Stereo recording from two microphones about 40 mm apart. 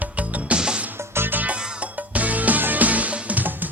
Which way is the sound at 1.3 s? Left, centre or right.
Right.